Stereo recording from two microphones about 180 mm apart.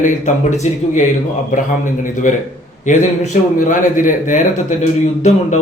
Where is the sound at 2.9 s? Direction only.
45° left (ahead or behind).